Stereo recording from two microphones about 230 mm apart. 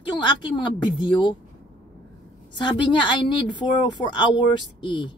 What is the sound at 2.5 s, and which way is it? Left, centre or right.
Speech, centre.